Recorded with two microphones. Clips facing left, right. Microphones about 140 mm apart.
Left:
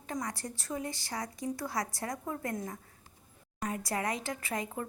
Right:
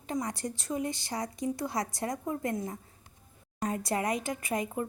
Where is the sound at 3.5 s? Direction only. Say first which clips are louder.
Right 4 dB; 30° right (ahead or behind).